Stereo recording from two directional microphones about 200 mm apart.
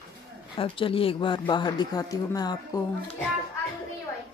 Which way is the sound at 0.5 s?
25° left (ahead or behind).